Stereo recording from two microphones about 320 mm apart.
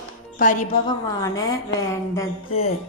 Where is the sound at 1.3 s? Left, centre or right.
Centre.